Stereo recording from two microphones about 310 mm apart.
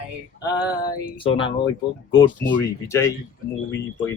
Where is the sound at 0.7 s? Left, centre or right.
Centre.